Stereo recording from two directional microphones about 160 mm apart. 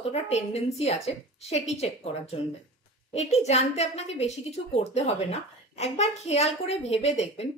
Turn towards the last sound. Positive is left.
turn(degrees=40)  # may be behind; listen again after turning